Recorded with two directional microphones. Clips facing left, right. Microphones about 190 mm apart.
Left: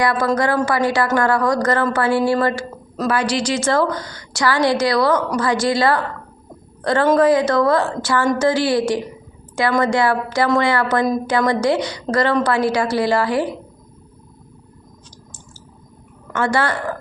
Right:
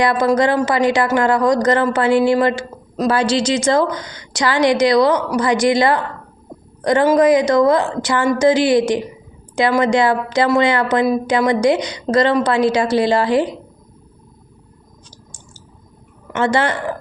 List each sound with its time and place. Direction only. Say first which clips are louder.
0.0 s a woman's voice: right 3 dB; 20° right (ahead or behind)
16.3 s speech: right 2 dB; 20° right (ahead or behind)